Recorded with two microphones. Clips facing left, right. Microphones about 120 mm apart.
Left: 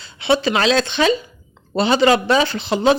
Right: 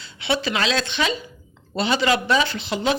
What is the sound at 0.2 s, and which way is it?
Speech, 30° left (ahead or behind).